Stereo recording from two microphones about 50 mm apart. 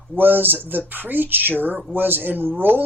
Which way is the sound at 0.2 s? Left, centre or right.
Right.